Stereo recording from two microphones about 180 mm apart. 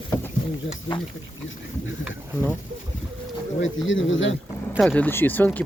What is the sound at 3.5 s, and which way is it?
Speech, 90° left.